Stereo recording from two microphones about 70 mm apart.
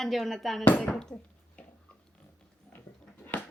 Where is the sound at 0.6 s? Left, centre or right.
Centre.